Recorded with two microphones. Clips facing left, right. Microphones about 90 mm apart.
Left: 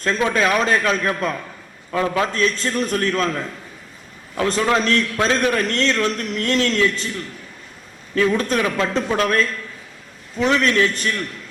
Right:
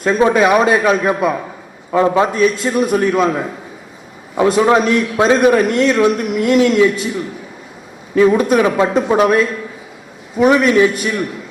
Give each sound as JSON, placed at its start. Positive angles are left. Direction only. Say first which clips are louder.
{"t": 0.3, "sound": "a man's voice", "louder": "right 6 dB", "side_deg": -15}
{"t": 2.3, "sound": "a man's voice", "louder": "right 6 dB", "side_deg": -10}